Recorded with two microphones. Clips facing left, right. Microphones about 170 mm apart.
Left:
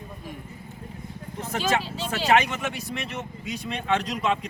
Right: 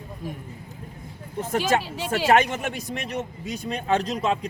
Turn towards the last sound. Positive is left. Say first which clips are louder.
# right 2 dB
turn(degrees=-35)  # may be behind; listen again after turning